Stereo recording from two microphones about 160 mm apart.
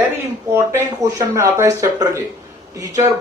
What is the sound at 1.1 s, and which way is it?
Speech, 15° right (ahead or behind).